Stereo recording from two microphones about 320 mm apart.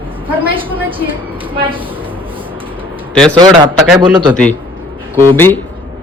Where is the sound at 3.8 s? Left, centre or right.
Centre.